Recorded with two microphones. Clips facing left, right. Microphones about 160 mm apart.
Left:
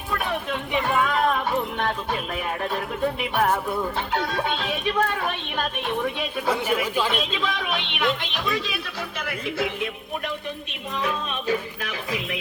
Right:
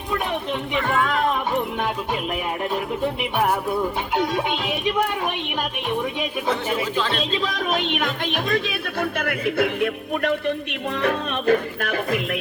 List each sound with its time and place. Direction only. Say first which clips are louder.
0.7 s speech: even; 15° left (ahead or behind)
3.0 s speech: left 2 dB; 10° right (ahead or behind)
7.4 s speech: right 4 dB; 40° right (ahead or behind)